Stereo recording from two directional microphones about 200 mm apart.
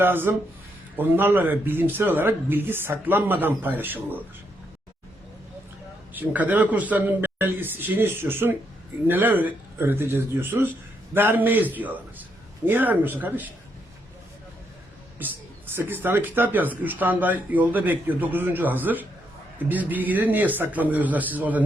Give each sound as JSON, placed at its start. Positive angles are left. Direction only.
{"t": 0.0, "sound": "speech", "side_deg": -10}
{"t": 6.1, "sound": "speech", "side_deg": -10}
{"t": 15.2, "sound": "speech", "side_deg": -10}